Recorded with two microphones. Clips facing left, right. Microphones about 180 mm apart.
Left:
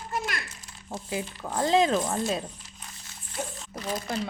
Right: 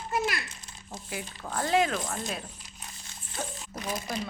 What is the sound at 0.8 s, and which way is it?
Speech, 30° left (ahead or behind).